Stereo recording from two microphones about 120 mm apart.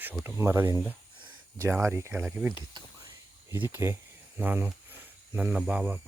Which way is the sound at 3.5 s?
20° right (ahead or behind).